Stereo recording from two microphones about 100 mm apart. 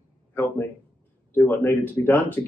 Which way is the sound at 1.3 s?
20° left (ahead or behind).